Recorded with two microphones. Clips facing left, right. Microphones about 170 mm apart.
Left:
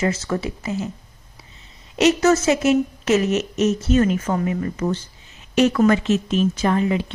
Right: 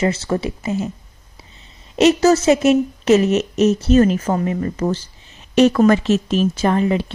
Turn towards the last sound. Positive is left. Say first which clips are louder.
# right 3 dB
turn(degrees=-35)  # may be behind; listen again after turning